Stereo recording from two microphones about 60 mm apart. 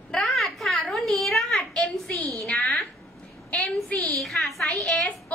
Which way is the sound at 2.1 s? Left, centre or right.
Left.